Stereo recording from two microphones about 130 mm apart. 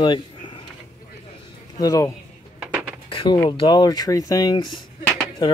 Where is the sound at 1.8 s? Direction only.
25° left (ahead or behind).